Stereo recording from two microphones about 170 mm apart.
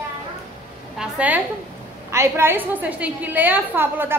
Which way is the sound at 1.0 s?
10° right (ahead or behind).